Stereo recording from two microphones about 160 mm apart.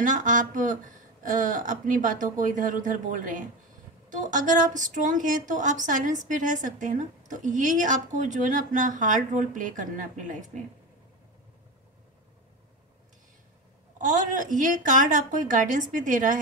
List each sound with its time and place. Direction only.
0.0 s a woman's voice: 55° right (ahead or behind)
13.9 s a woman's voice: 55° right (ahead or behind)